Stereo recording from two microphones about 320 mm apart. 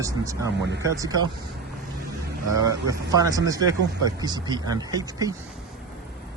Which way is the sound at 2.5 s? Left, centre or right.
Right.